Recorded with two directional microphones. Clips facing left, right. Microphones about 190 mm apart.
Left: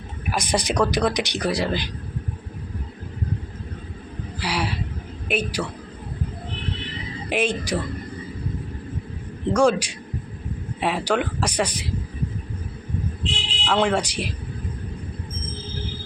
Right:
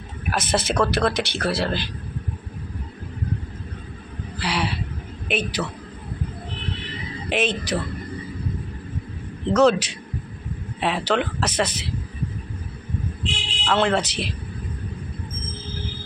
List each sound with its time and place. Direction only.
0.3 s speech: 15° left (ahead or behind)
4.4 s speech: 10° left (ahead or behind)
7.3 s speech: 10° left (ahead or behind)
9.5 s speech: 10° left (ahead or behind)
13.7 s speech: 10° left (ahead or behind)